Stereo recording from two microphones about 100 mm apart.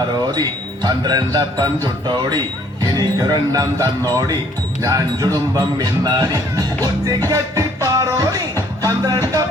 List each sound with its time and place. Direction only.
0.3 s speech: 45° right (ahead or behind)
7.3 s music: 35° right (ahead or behind)